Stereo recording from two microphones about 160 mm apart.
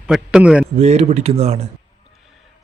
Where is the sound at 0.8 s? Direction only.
45° right (ahead or behind).